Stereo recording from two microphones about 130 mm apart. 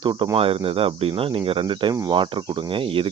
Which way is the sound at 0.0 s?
35° right (ahead or behind).